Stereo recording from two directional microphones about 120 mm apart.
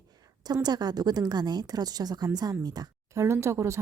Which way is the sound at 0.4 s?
35° right (ahead or behind).